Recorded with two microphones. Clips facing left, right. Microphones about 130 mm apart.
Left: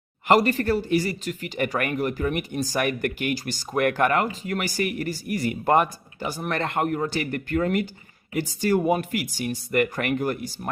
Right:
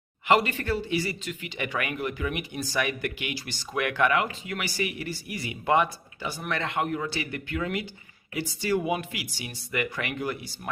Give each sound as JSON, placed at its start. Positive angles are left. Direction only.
{"t": 0.3, "sound": "speech", "side_deg": 40}